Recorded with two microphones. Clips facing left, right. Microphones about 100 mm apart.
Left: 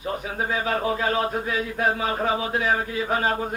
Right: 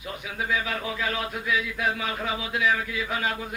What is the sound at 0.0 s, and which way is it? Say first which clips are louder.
A man's voice: left 5 dB; 40° left (ahead or behind).